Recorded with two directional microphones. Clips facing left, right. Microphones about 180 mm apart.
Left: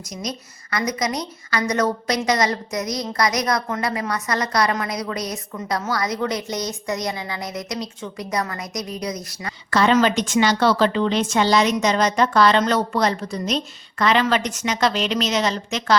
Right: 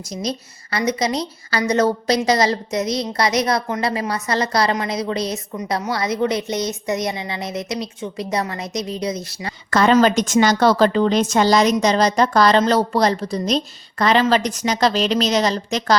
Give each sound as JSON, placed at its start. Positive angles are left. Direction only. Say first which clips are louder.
{"t": 0.1, "sound": "a woman's voice", "louder": "right 5 dB", "side_deg": -30}
{"t": 9.6, "sound": "a woman's voice", "louder": "right 3 dB", "side_deg": -45}